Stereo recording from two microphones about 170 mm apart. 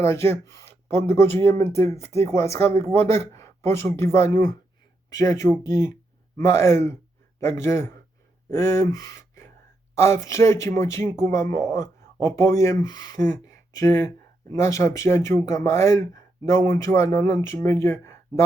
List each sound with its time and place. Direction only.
0.0 s speech: 15° left (ahead or behind)